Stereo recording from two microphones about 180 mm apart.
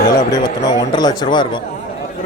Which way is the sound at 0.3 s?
20° left (ahead or behind).